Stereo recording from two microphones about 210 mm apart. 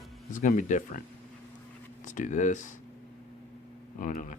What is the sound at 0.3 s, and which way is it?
Speech, 35° left (ahead or behind).